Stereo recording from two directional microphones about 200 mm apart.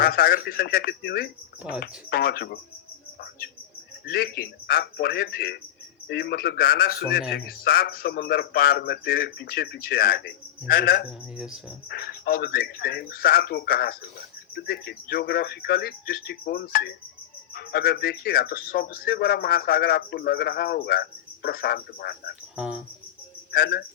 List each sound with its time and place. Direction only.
0.0 s a man's voice: 50° left (ahead or behind)
4.0 s a man's voice: 50° left (ahead or behind)
11.3 s speech: 5° right (ahead or behind)
11.9 s a man's voice: 50° left (ahead or behind)
22.5 s speech: 5° right (ahead or behind)
23.5 s speech: 55° left (ahead or behind)